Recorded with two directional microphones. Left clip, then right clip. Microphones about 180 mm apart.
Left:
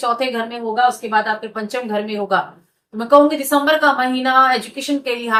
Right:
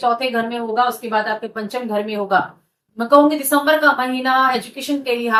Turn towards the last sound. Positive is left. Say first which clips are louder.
# even
turn(degrees=15)  # may be behind; listen again after turning